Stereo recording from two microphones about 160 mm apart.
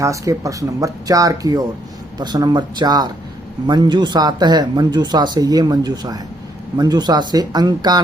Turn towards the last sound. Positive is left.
turn(degrees=-25)  # may be behind; listen again after turning